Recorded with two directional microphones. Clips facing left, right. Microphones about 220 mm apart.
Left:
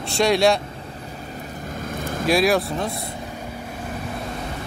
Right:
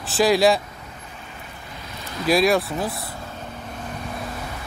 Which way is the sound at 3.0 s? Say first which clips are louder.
Left 3 dB; 15° left (ahead or behind).